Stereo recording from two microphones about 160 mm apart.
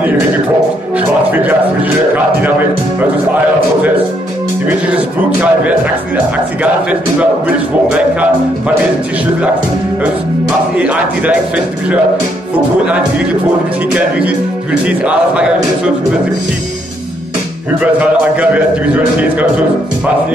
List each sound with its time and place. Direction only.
0.9 s a sound: 10° right (ahead or behind)
4.6 s a man's voice: 10° right (ahead or behind)
10.8 s a man's voice: 10° right (ahead or behind)
13.9 s a man's voice: 10° right (ahead or behind)
17.9 s a man's voice: 10° right (ahead or behind)